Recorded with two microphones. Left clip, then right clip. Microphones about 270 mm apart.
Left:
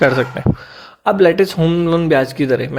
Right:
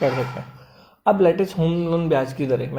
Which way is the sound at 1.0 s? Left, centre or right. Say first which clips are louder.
Left 5 dB; left.